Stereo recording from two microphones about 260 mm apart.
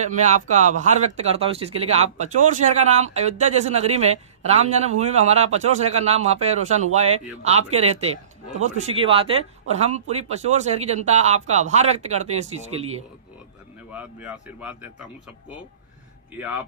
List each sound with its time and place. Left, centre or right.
0.0 s speech: right
13.9 s speech: centre